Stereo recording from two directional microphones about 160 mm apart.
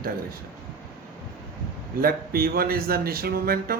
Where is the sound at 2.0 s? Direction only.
70° right (ahead or behind).